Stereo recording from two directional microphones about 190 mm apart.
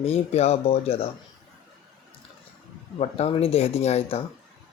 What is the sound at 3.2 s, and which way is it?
Speech, 30° left (ahead or behind).